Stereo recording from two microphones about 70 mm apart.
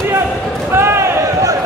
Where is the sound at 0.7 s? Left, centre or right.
Right.